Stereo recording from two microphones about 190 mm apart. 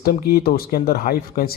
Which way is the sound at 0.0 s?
55° left (ahead or behind).